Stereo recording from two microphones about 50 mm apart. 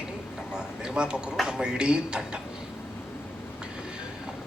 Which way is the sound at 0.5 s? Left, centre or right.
Centre.